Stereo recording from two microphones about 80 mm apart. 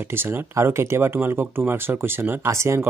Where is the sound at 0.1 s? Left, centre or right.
Right.